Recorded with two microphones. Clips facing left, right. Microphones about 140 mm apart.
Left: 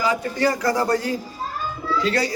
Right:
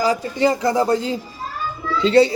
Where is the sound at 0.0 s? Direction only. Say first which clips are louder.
Right 3 dB; 35° right (ahead or behind).